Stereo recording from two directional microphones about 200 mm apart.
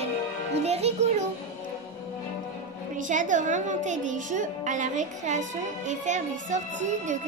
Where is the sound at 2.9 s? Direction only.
40° right (ahead or behind).